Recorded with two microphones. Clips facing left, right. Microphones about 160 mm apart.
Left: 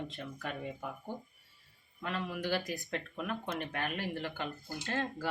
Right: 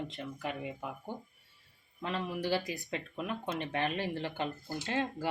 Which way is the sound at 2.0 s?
20° right (ahead or behind).